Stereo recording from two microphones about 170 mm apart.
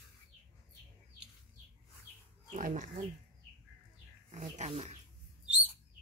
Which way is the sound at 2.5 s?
50° right (ahead or behind).